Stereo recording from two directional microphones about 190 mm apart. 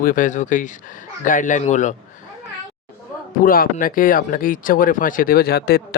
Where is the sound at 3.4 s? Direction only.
50° left (ahead or behind).